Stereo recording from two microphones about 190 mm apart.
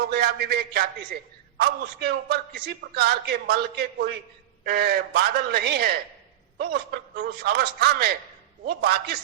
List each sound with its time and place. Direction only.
0.0 s a man's voice: 55° right (ahead or behind)